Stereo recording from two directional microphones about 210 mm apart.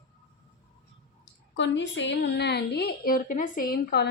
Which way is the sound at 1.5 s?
60° left (ahead or behind).